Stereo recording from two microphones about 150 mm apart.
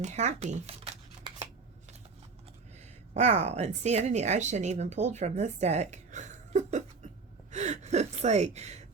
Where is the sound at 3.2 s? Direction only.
50° right (ahead or behind).